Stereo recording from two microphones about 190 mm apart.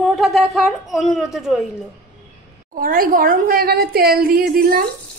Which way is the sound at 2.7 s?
50° right (ahead or behind).